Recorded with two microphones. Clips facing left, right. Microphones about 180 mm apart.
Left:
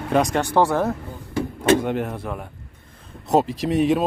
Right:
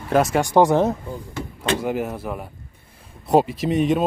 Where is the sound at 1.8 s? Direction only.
5° right (ahead or behind).